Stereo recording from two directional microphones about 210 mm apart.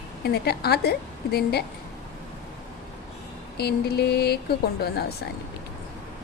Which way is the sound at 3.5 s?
50° left (ahead or behind).